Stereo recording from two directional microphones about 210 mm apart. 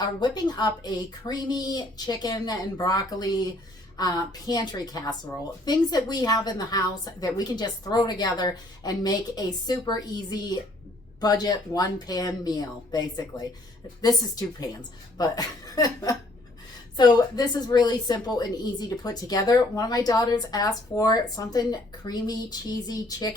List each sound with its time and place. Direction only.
0.0 s a woman's voice: 20° left (ahead or behind)